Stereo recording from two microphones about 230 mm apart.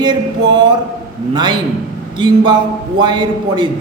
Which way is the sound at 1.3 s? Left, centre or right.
Centre.